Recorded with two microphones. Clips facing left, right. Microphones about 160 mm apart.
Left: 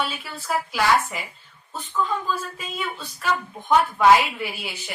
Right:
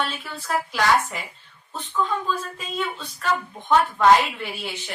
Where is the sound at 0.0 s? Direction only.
5° left (ahead or behind).